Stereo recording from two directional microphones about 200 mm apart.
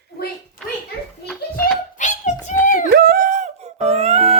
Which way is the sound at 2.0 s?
40° left (ahead or behind).